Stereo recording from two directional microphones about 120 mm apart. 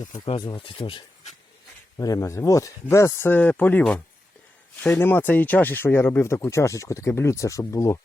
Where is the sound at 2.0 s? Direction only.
30° left (ahead or behind).